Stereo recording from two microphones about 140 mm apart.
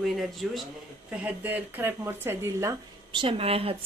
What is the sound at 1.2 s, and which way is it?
Speech, 15° right (ahead or behind).